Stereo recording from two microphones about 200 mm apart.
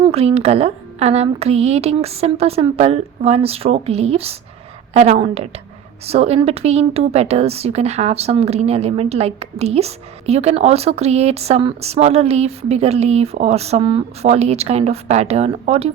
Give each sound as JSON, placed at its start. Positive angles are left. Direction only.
{"t": 0.0, "sound": "speech", "side_deg": -30}